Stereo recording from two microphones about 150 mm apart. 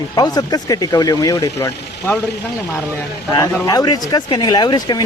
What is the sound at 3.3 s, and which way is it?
Speech, 25° left (ahead or behind).